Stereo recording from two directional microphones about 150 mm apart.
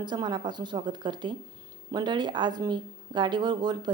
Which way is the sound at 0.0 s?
30° right (ahead or behind).